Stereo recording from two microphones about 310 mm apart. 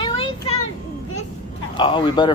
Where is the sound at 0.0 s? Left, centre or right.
Centre.